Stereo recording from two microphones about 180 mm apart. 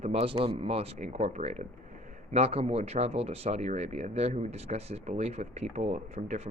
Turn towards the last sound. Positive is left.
turn(degrees=-40)  # may be behind; listen again after turning